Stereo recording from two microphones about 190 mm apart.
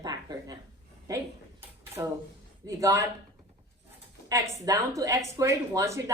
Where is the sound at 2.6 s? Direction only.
15° right (ahead or behind).